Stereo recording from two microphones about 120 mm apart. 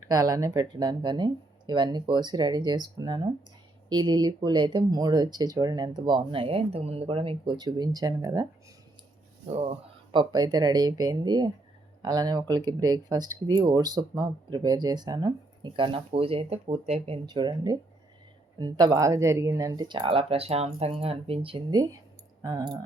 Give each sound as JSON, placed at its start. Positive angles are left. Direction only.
{"t": 0.1, "sound": "speech", "side_deg": -30}
{"t": 10.1, "sound": "speech", "side_deg": -35}
{"t": 17.2, "sound": "speech", "side_deg": -40}
{"t": 21.7, "sound": "speech", "side_deg": -35}